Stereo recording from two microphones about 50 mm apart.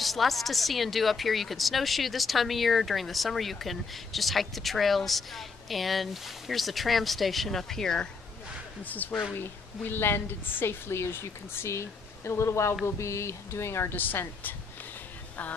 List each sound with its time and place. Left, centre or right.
0.0 s a woman's voice: centre
8.8 s a woman's voice: left
9.3 s a woman's voice: left
11.7 s speech: left
13.9 s a woman's voice: left